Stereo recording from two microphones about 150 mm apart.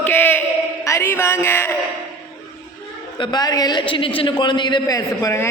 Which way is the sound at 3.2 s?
25° left (ahead or behind).